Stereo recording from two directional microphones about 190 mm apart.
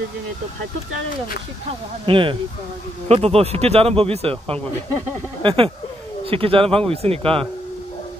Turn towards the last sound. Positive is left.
turn(degrees=-30)  # may be behind; listen again after turning